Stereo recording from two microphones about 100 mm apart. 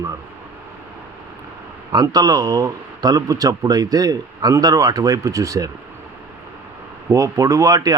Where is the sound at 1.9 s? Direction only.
40° right (ahead or behind).